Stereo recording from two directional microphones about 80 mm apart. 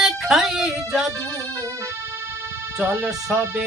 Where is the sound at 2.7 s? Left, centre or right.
Centre.